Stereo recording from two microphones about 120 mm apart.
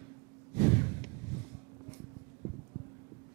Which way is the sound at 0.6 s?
20° right (ahead or behind).